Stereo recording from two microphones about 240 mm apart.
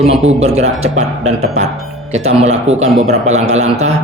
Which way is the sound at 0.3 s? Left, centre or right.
Right.